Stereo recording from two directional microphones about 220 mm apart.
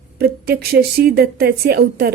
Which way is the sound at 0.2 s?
45° right (ahead or behind).